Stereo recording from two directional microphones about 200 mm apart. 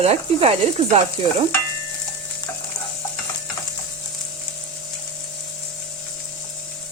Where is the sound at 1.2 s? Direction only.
30° right (ahead or behind).